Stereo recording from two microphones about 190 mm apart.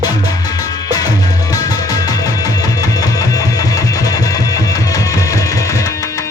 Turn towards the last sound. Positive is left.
turn(degrees=15)  # may be behind; listen again after turning